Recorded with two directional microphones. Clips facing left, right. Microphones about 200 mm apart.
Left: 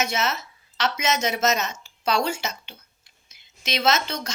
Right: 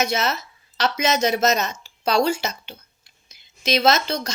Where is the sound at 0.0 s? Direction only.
35° right (ahead or behind).